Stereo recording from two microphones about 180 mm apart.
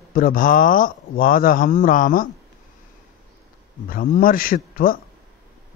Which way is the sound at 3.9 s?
50° left (ahead or behind).